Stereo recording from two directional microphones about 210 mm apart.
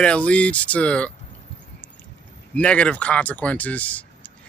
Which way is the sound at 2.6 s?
5° left (ahead or behind).